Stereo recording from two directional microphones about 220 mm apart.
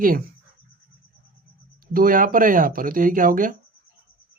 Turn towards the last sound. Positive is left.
turn(degrees=-40)  # may be behind; listen again after turning